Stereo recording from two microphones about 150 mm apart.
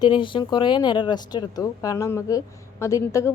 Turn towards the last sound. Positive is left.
turn(degrees=20)  # may be behind; listen again after turning